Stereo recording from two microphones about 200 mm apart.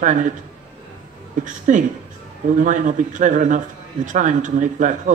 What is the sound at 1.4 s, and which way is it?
A man's voice, 40° right (ahead or behind).